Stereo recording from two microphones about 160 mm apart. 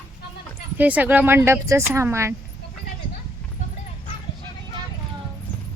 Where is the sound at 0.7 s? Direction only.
10° right (ahead or behind).